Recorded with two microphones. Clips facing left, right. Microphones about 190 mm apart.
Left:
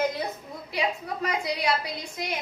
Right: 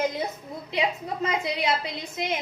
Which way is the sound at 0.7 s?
20° right (ahead or behind).